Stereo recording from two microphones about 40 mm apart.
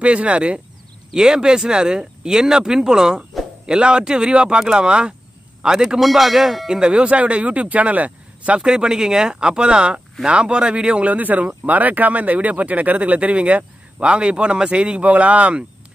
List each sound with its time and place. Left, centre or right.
0.0 s speech: right
1.1 s speech: centre
5.9 s speech: centre
6.9 s speech: right
8.5 s speech: centre
11.1 s speech: right